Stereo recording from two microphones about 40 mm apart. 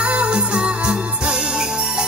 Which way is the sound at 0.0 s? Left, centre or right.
Right.